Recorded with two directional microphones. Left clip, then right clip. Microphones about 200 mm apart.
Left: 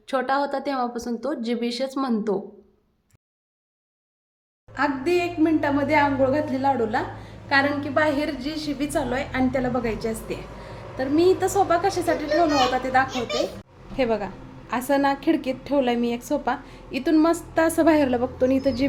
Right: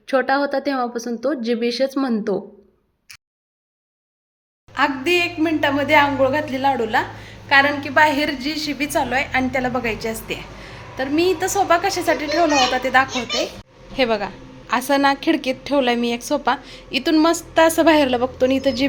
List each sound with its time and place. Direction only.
0.0 s a woman's voice: 10° right (ahead or behind)
4.7 s a woman's voice: centre (ahead or behind)